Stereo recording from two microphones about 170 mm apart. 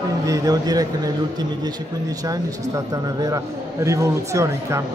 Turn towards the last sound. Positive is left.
turn(degrees=-15)  # may be behind; listen again after turning